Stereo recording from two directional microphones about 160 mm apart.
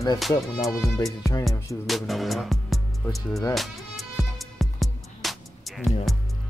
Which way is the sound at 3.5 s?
Centre (ahead or behind).